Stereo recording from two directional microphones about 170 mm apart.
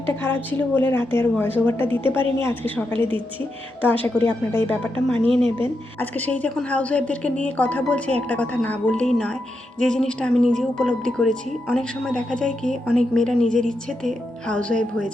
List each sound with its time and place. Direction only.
0.2 s a woman's voice: 10° left (ahead or behind)
4.3 s a woman's voice: 10° left (ahead or behind)
5.3 s speech: 30° right (ahead or behind)
5.6 s a woman's voice: 10° left (ahead or behind)